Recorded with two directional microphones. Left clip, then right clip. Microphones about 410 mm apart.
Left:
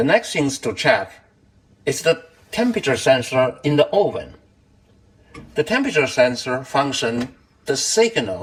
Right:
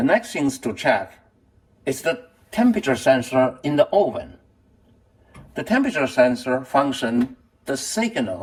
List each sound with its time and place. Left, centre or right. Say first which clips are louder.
0.0 s speech: left 2 dB; centre
5.5 s speech: left 3 dB; centre